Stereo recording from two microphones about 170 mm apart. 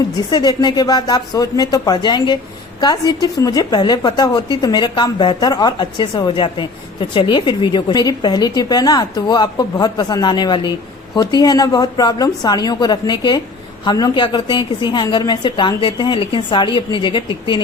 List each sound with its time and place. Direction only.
0.3 s a woman's voice: 25° left (ahead or behind)